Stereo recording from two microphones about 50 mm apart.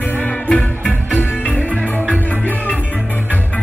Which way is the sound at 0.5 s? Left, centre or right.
Left.